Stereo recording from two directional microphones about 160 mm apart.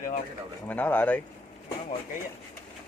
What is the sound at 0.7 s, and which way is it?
Speech, 10° left (ahead or behind).